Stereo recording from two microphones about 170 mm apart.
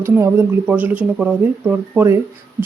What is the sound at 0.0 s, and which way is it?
Speech, 15° right (ahead or behind).